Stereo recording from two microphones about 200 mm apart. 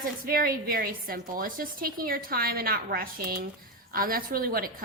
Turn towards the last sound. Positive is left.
turn(degrees=-45)  # may be behind; listen again after turning